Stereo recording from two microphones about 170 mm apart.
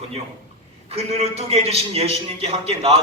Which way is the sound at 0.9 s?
35° right (ahead or behind).